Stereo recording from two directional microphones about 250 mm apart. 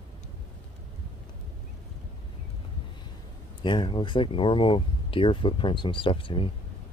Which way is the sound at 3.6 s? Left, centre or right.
Centre.